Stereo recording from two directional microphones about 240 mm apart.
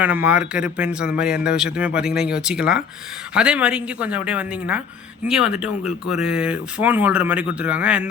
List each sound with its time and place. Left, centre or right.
0.0 s speech: centre